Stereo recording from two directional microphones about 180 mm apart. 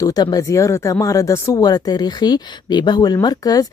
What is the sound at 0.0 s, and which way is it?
Speech, 20° left (ahead or behind).